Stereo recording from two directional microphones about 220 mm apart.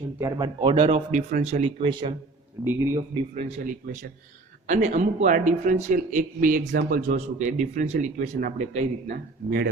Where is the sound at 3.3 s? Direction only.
35° right (ahead or behind).